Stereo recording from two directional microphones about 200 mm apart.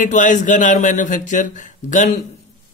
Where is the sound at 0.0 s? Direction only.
40° left (ahead or behind).